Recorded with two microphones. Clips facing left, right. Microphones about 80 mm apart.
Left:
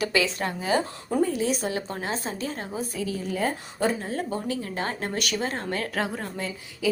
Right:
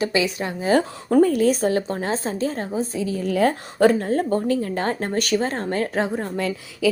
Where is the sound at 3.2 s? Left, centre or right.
Right.